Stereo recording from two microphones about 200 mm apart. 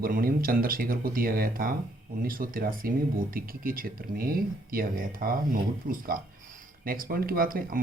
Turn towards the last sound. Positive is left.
turn(degrees=-45)  # may be behind; listen again after turning